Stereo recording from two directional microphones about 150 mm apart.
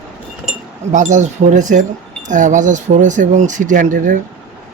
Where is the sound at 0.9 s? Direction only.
55° right (ahead or behind).